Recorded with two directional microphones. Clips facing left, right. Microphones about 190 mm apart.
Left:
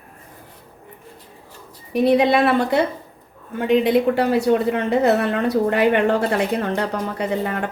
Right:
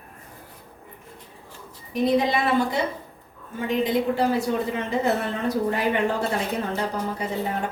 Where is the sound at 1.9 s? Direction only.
70° left (ahead or behind).